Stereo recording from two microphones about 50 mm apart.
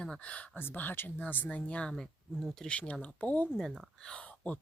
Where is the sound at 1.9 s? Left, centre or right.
Centre.